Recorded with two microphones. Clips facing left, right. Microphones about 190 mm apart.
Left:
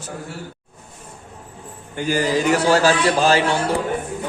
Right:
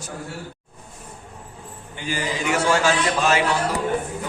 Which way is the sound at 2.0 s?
45° left (ahead or behind).